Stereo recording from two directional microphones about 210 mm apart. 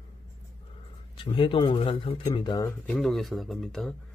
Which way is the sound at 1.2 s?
25° left (ahead or behind).